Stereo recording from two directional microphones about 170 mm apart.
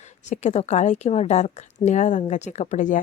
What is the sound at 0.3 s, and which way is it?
A woman's voice, 40° left (ahead or behind).